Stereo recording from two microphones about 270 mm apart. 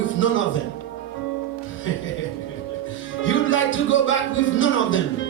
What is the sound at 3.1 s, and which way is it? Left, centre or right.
Speech, left.